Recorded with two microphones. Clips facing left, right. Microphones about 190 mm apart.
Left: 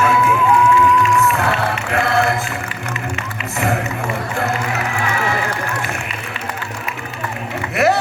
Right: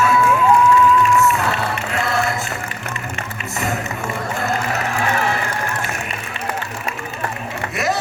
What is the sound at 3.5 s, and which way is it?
Music, 60° left (ahead or behind).